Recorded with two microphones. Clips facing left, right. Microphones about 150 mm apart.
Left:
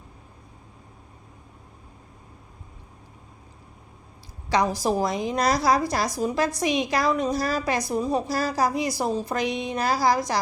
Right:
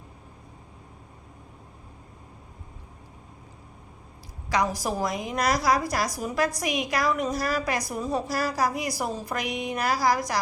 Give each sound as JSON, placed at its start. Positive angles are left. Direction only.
{"t": 4.4, "sound": "a woman's voice", "side_deg": 25}